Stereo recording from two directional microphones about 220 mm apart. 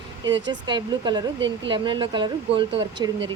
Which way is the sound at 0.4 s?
20° right (ahead or behind).